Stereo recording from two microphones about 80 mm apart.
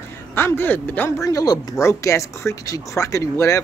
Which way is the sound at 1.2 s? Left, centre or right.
Left.